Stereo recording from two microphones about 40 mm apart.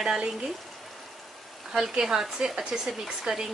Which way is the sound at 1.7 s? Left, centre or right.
Centre.